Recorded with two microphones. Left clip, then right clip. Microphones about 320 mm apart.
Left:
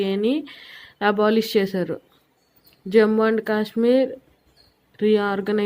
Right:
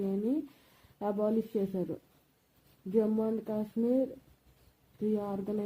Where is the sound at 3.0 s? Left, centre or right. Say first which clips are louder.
Left 13 dB; left.